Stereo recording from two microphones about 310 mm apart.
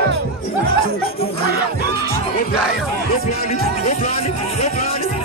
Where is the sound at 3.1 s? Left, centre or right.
Left.